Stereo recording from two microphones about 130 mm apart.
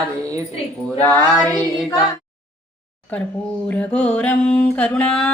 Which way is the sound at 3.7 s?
10° left (ahead or behind).